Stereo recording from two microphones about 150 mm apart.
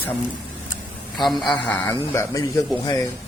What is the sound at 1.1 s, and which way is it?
Speech, centre (ahead or behind).